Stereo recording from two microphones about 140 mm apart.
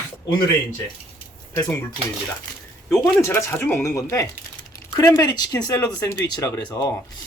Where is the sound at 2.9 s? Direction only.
20° left (ahead or behind).